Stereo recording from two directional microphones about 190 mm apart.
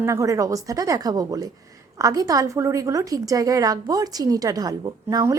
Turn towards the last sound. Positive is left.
turn(degrees=-20)  # may be behind; listen again after turning